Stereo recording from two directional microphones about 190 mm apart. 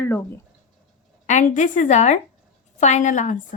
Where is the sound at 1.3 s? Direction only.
40° left (ahead or behind).